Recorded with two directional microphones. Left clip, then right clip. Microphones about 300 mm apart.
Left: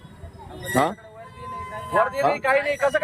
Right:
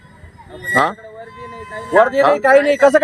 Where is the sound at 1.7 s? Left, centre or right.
Right.